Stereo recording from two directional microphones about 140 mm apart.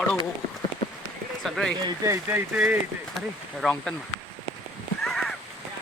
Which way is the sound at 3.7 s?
5° left (ahead or behind).